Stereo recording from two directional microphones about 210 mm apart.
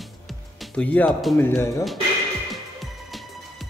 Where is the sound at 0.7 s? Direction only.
5° left (ahead or behind).